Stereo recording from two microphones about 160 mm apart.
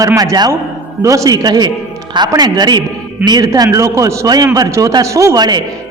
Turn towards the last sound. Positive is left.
turn(degrees=-25)  # may be behind; listen again after turning